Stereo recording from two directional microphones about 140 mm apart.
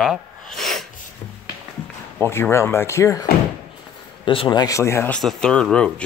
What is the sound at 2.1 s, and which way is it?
Speech, 15° left (ahead or behind).